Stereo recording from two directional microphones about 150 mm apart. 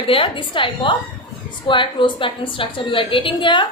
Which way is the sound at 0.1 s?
35° left (ahead or behind).